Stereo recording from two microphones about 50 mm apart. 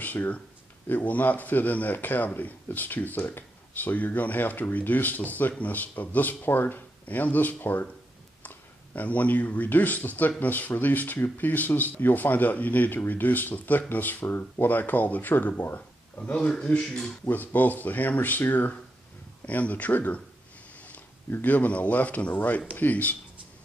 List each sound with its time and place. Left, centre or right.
0.0 s speech: left
16.2 s speech: left
17.3 s speech: left
21.3 s speech: left